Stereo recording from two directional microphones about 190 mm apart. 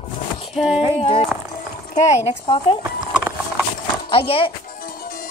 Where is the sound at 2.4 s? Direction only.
25° left (ahead or behind).